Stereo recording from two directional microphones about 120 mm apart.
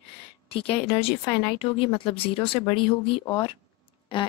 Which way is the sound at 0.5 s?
50° left (ahead or behind).